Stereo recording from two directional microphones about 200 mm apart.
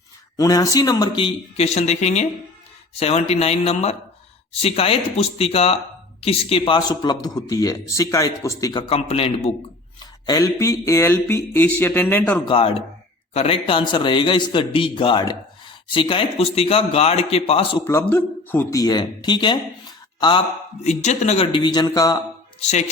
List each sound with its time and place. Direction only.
0.3 s a man's voice: 15° left (ahead or behind)
10.2 s speech: 15° left (ahead or behind)
12.5 s a man's voice: 25° left (ahead or behind)
17.8 s speech: 10° left (ahead or behind)
20.8 s a man's voice: 35° left (ahead or behind); by 22.2 s 15° left (ahead or behind)